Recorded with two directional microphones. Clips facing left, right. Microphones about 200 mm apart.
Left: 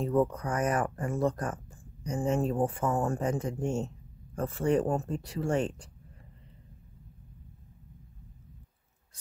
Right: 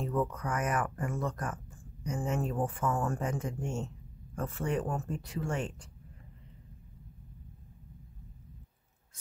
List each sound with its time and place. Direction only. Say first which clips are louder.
0.0 s speech: left 5 dB; 30° left (ahead or behind)